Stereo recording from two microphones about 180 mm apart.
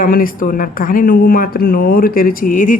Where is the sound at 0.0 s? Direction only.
50° left (ahead or behind).